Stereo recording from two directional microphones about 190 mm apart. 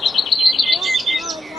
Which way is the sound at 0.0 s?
Centre (ahead or behind).